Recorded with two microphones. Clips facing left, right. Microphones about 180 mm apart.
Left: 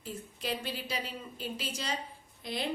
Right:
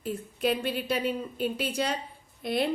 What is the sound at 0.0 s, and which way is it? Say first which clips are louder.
A woman's voice: right 10 dB; 55° right (ahead or behind).